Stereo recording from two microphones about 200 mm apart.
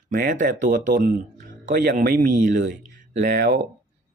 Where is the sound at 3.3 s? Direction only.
55° right (ahead or behind).